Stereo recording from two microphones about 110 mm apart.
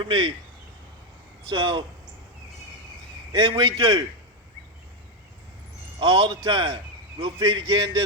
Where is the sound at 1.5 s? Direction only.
45° right (ahead or behind).